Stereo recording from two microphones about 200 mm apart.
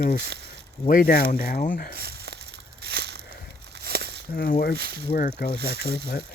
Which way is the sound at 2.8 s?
50° right (ahead or behind).